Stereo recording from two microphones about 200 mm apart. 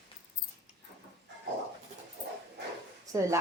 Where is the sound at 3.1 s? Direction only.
15° right (ahead or behind).